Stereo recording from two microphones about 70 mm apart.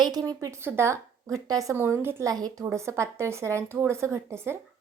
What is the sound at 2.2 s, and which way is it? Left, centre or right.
A woman's voice, right.